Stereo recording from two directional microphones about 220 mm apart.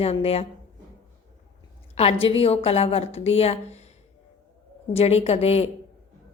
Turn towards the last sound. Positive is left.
turn(degrees=30)  # may be behind; listen again after turning